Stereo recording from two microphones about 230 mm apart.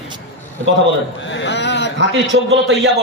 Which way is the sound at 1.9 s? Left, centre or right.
Right.